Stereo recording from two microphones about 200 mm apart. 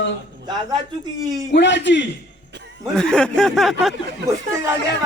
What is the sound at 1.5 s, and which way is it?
Speech, 60° left (ahead or behind).